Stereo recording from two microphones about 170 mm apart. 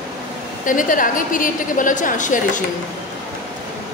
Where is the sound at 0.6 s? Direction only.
50° left (ahead or behind).